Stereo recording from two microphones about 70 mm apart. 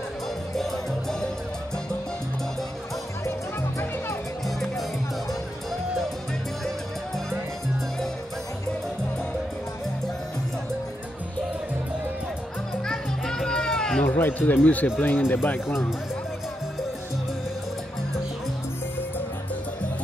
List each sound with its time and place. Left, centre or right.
4.5 s music: centre
12.8 s music: centre
14.0 s speech: left